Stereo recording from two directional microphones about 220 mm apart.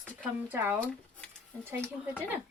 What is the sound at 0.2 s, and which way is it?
Speech, 5° right (ahead or behind).